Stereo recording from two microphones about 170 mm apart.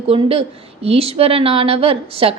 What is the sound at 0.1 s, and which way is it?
A woman's voice, 35° right (ahead or behind).